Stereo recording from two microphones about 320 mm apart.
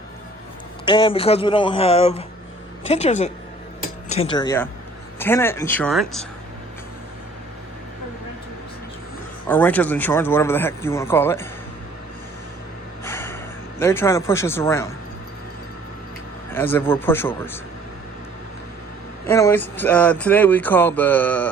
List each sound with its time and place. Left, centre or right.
0.9 s speech: centre
9.5 s speech: centre
13.1 s a sound: centre
16.5 s speech: centre
19.3 s speech: centre